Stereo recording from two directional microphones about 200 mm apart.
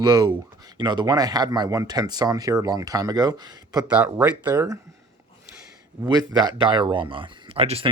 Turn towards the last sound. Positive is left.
turn(degrees=-30)  # may be behind; listen again after turning